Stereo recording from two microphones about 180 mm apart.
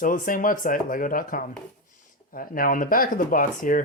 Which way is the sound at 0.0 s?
50° left (ahead or behind).